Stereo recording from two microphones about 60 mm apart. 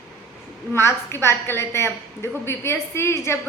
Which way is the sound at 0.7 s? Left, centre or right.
Left.